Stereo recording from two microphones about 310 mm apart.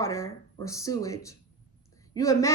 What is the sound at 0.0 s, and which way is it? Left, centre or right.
A woman's voice, centre.